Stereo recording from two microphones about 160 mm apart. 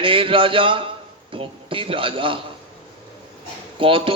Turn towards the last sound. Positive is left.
turn(degrees=-35)  # may be behind; listen again after turning